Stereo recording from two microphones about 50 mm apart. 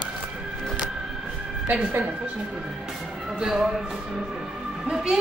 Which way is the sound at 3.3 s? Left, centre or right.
Centre.